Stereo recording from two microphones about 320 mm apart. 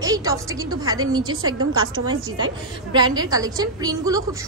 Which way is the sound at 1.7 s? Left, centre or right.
Centre.